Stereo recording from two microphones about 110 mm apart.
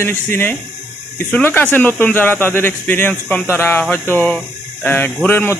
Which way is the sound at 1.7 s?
15° left (ahead or behind).